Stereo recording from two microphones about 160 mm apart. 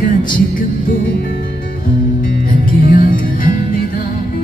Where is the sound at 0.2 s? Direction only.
60° left (ahead or behind).